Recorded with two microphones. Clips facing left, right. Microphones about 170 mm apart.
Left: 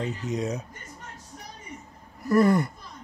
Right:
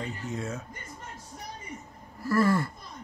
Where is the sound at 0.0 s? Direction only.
20° left (ahead or behind).